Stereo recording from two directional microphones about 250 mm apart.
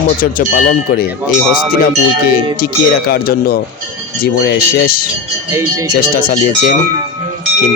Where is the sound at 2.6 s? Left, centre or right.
Left.